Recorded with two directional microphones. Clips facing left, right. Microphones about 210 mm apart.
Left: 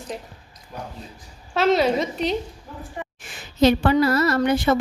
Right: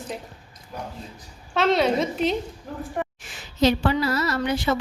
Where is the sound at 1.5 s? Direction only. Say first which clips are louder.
Left 1 dB; centre (ahead or behind).